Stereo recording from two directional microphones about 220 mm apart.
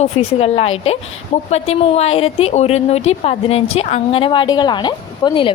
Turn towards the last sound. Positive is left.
turn(degrees=20)  # may be behind; listen again after turning